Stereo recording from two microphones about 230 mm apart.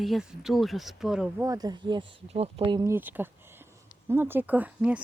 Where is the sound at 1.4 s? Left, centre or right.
Centre.